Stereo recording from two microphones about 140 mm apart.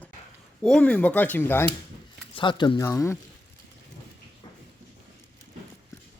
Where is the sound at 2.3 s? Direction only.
35° left (ahead or behind).